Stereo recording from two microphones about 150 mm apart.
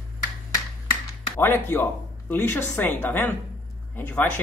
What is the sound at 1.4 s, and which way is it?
Speech, 15° left (ahead or behind).